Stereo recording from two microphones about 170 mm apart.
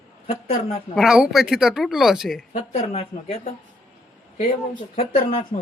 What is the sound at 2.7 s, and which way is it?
Speech, 35° left (ahead or behind).